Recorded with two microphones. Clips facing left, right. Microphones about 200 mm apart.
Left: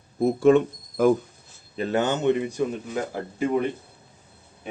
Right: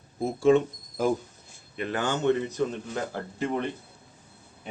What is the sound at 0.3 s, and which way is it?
Speech, 55° left (ahead or behind).